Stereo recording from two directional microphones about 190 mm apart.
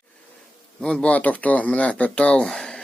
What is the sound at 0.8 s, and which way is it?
Speech, 5° left (ahead or behind).